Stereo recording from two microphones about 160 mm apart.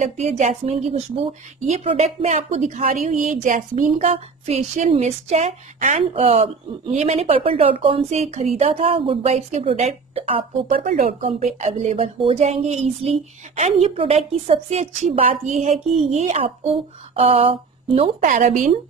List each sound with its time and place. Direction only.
0.0 s a woman's voice: 45° right (ahead or behind)
10.7 s a woman's voice: 55° right (ahead or behind); by 18.1 s 35° right (ahead or behind)
18.2 s a woman's voice: 55° right (ahead or behind)